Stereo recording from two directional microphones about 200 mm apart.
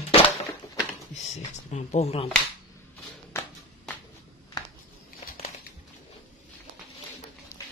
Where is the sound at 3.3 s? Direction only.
10° left (ahead or behind).